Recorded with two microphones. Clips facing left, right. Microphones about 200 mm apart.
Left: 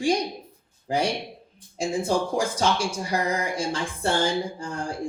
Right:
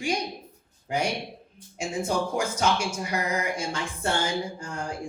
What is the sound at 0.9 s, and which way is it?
Speech, 35° left (ahead or behind).